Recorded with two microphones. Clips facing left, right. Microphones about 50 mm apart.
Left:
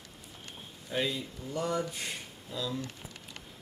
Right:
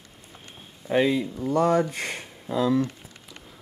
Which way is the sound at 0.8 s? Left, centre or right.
Right.